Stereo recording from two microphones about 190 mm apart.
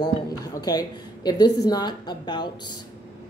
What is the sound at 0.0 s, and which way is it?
A woman's voice, 20° left (ahead or behind).